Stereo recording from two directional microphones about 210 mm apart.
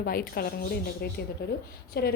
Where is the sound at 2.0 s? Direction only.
50° left (ahead or behind).